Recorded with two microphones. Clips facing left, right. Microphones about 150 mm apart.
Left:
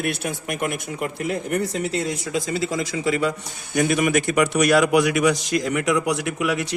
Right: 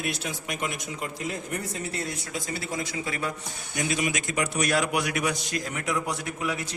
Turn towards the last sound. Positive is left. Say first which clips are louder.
# left 7 dB
turn(degrees=80)